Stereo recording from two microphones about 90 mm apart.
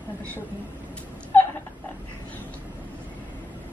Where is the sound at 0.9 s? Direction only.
15° left (ahead or behind).